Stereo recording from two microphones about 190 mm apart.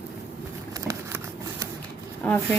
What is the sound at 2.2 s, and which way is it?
Speech, 5° left (ahead or behind).